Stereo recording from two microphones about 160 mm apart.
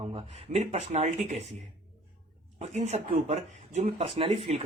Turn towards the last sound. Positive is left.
turn(degrees=-40)  # may be behind; listen again after turning